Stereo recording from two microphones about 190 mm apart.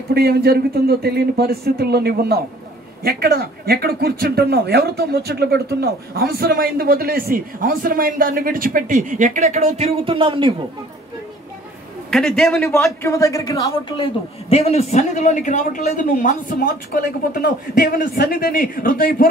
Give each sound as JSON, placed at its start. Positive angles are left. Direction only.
{"t": 0.1, "sound": "speech", "side_deg": -55}
{"t": 12.1, "sound": "a man's voice", "side_deg": 0}
{"t": 12.7, "sound": "a man's voice", "side_deg": 15}